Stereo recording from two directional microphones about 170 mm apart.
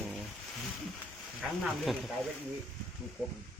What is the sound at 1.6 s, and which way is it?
Speech, centre (ahead or behind).